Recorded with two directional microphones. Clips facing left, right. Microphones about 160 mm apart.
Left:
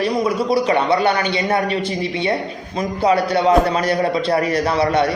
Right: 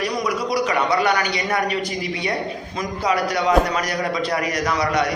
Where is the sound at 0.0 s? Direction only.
30° left (ahead or behind).